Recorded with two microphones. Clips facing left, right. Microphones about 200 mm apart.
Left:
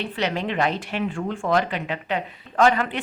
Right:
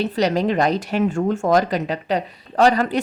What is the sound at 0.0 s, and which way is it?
A woman's voice, 40° right (ahead or behind).